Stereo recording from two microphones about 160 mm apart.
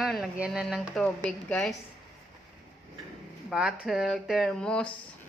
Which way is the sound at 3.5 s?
5° right (ahead or behind).